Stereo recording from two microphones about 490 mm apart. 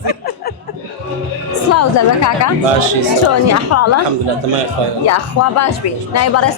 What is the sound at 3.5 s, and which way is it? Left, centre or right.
Speech, left.